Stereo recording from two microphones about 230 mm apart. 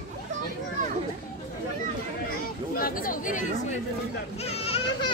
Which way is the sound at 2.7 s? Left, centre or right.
Left.